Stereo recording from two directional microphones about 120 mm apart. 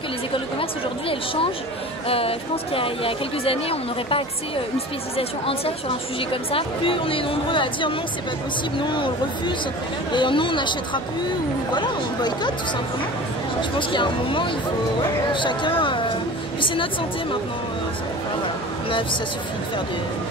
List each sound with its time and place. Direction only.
0.3 s speech: 50° left (ahead or behind)
10.1 s speech: 45° left (ahead or behind)
13.6 s speech: 45° left (ahead or behind)